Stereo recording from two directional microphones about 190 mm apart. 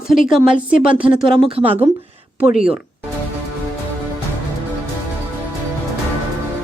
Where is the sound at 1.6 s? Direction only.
10° right (ahead or behind).